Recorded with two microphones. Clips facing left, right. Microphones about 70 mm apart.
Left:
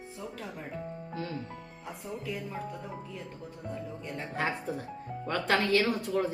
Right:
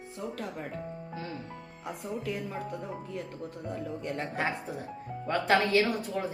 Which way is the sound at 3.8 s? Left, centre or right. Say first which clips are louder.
Right 4 dB; right.